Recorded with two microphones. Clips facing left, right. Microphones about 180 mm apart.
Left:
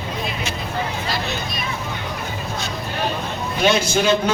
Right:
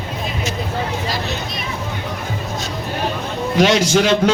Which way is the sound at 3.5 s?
90° right.